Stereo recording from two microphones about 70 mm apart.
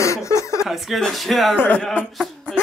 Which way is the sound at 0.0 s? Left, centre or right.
Left.